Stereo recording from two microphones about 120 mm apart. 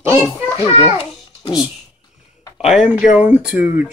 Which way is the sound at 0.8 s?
55° left (ahead or behind).